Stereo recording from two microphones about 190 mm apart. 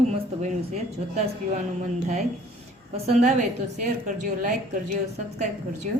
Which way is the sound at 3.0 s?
35° right (ahead or behind).